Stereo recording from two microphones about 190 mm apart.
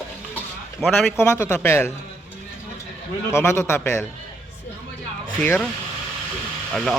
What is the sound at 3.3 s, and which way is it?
Speech, 15° left (ahead or behind).